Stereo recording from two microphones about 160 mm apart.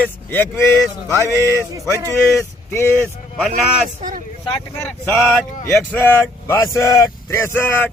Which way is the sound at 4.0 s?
55° right (ahead or behind).